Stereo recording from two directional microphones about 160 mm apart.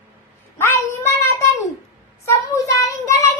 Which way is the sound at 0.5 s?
15° left (ahead or behind).